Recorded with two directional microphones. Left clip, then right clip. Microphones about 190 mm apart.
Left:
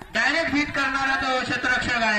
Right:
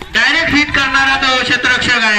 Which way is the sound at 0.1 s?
55° left (ahead or behind).